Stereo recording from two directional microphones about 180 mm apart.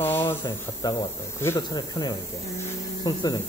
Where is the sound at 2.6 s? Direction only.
20° left (ahead or behind).